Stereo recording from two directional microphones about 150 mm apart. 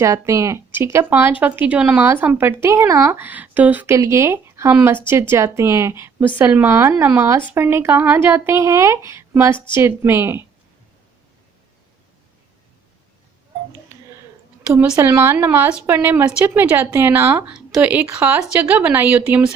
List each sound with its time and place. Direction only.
0.0 s speech: 20° right (ahead or behind)
14.7 s speech: 15° right (ahead or behind)